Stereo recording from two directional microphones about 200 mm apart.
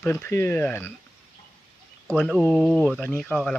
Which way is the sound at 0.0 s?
10° left (ahead or behind).